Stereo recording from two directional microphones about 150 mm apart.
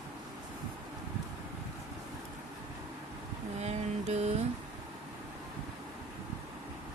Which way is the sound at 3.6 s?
50° right (ahead or behind).